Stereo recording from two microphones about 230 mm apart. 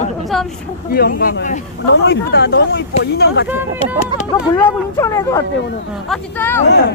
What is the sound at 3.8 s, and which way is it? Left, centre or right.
Speech, left.